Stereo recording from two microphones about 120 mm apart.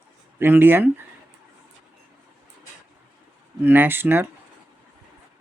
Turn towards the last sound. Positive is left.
turn(degrees=-15)  # may be behind; listen again after turning